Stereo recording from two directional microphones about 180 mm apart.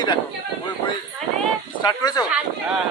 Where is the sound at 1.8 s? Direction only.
25° left (ahead or behind).